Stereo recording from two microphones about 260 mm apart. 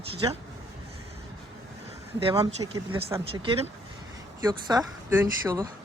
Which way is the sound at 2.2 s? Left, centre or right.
Centre.